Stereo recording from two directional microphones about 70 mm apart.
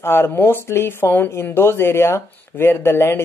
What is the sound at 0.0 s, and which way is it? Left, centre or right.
Speech, left.